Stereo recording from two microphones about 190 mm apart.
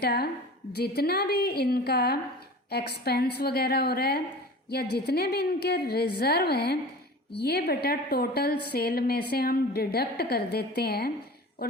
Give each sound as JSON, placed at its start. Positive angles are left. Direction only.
{"t": 0.0, "sound": "a woman's voice", "side_deg": 55}